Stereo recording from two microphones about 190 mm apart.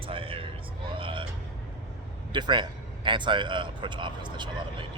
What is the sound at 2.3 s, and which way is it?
A man's voice, 25° right (ahead or behind).